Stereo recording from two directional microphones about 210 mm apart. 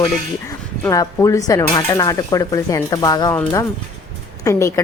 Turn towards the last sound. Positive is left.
turn(degrees=15)  # may be behind; listen again after turning